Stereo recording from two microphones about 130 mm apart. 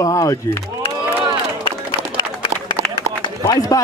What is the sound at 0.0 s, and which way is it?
Speech, 25° left (ahead or behind).